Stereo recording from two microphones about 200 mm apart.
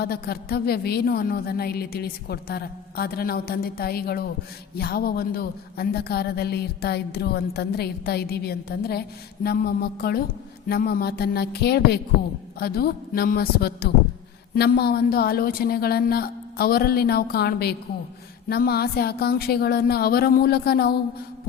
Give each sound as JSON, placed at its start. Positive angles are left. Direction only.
{"t": 0.0, "sound": "speech", "side_deg": 50}